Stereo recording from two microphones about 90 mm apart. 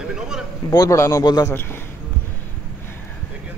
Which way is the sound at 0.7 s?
35° left (ahead or behind).